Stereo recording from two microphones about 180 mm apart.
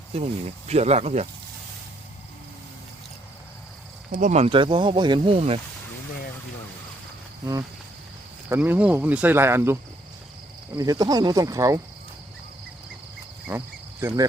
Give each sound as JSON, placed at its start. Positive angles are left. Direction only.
{"t": 0.1, "sound": "speech", "side_deg": -40}
{"t": 4.1, "sound": "speech", "side_deg": -45}
{"t": 8.4, "sound": "speech", "side_deg": -10}
{"t": 10.8, "sound": "speech", "side_deg": -20}